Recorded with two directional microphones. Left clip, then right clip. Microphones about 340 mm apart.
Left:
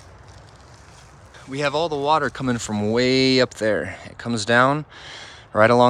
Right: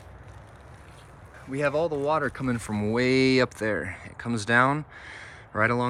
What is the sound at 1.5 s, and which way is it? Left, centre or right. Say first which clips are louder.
Speech: left 3 dB; centre.